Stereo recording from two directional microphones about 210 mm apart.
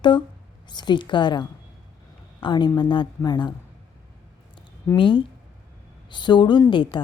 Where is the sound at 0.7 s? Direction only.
20° left (ahead or behind).